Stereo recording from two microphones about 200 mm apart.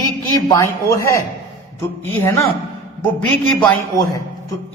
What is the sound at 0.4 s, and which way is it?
Speech, 15° left (ahead or behind).